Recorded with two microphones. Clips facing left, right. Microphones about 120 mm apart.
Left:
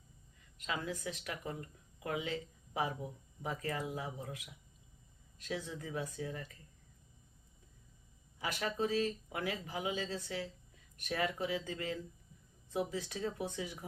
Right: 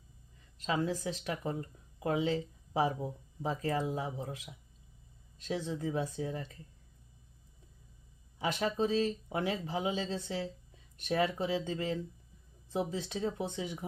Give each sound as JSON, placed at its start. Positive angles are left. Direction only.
{"t": 0.6, "sound": "speech", "side_deg": -30}
{"t": 8.4, "sound": "speech", "side_deg": -25}